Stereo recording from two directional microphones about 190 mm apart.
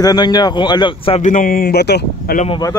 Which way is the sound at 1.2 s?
45° left (ahead or behind).